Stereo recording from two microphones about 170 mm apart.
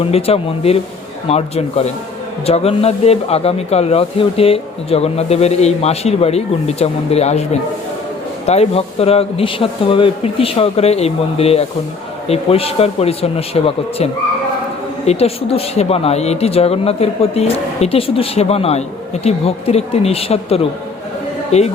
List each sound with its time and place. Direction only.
0.0 s speech: 35° left (ahead or behind)